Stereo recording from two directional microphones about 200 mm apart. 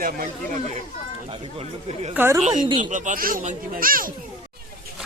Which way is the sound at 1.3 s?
30° right (ahead or behind).